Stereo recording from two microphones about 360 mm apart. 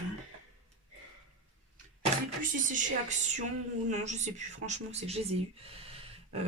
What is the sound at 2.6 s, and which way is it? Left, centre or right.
A woman's voice, right.